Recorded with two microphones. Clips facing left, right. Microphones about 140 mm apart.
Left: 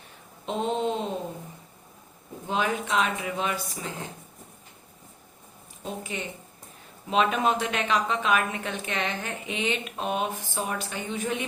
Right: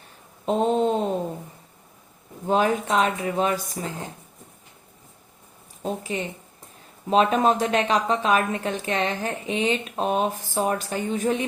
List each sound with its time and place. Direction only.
0.4 s a sound: 40° right (ahead or behind)
2.5 s a woman's voice: 40° right (ahead or behind)
5.8 s a woman's voice: 35° right (ahead or behind)